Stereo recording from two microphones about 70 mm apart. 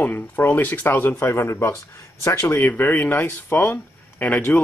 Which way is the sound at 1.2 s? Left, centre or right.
Left.